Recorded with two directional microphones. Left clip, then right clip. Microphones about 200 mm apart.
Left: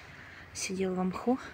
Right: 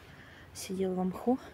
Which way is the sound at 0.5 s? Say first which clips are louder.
Left 1 dB; 5° right (ahead or behind).